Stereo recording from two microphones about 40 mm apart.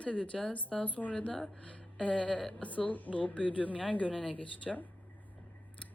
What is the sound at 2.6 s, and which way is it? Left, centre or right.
Speech, left.